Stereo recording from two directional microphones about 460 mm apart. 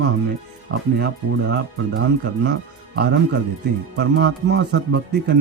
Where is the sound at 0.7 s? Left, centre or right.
Right.